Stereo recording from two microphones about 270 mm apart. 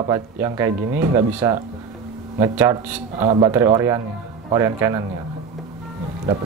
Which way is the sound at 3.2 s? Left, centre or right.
Right.